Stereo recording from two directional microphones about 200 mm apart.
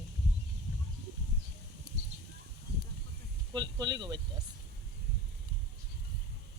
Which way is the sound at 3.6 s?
20° right (ahead or behind).